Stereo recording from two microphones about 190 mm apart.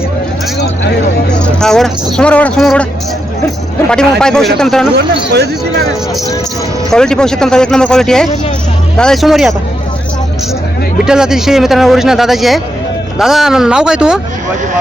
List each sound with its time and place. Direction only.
1.3 s speech: 5° left (ahead or behind)
4.2 s speech: 5° left (ahead or behind)
4.9 s speech: 60° right (ahead or behind)
6.9 s speech: 5° left (ahead or behind)
11.0 s speech: 5° right (ahead or behind)